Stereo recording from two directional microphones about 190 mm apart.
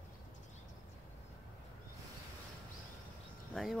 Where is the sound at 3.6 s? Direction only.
Centre (ahead or behind).